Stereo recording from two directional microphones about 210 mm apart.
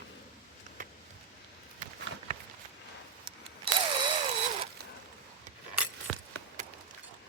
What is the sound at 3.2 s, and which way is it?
Camera, 25° right (ahead or behind).